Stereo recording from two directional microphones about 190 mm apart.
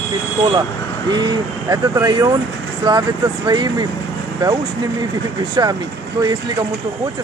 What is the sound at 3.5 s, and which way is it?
Speech, 20° right (ahead or behind).